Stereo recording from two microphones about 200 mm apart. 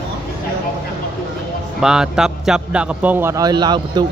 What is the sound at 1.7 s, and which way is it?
A man's voice, 5° right (ahead or behind).